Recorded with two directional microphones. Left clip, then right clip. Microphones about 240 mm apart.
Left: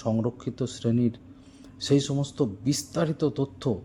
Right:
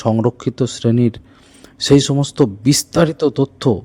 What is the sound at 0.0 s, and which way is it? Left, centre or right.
Speech, right.